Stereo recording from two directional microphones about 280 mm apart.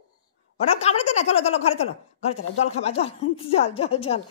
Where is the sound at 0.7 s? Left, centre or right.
Left.